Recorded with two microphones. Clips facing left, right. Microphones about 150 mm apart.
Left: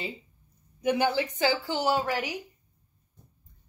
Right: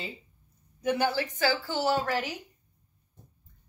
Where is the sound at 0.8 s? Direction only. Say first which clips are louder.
Left 2 dB; 15° left (ahead or behind).